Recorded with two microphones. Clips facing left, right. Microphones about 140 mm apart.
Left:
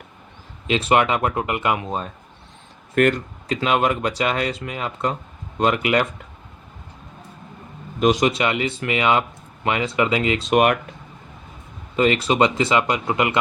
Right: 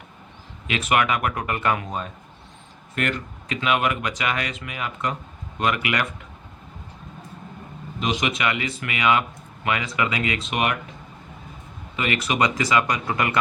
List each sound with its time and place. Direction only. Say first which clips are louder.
0.7 s speech: left 4 dB; 30° left (ahead or behind)
2.9 s speech: left 9 dB; 50° left (ahead or behind)
3.5 s speech: left 3 dB; 30° left (ahead or behind)
7.9 s speech: left 7 dB; 45° left (ahead or behind); by 10.5 s 30° left (ahead or behind)
10.5 s speech: left 9 dB; 50° left (ahead or behind)
11.9 s speech: left 6 dB; 30° left (ahead or behind)